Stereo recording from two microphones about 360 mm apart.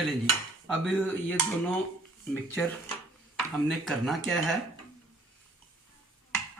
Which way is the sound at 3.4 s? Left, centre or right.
Centre.